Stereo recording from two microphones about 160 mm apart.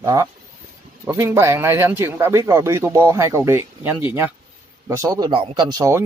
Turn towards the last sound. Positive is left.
turn(degrees=-30)  # may be behind; listen again after turning